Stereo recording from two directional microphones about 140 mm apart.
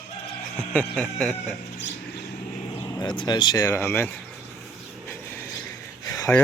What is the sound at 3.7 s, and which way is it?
Speech, 15° left (ahead or behind).